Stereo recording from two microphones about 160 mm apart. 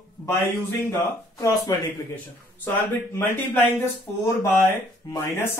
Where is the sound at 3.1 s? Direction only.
10° left (ahead or behind).